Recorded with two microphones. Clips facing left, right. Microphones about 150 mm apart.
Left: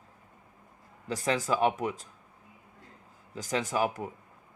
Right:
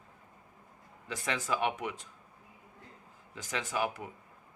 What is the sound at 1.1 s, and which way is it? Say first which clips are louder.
Speech: left 5 dB; 35° left (ahead or behind).